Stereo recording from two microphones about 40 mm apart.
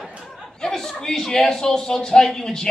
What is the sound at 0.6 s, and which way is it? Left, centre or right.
A man's voice, centre.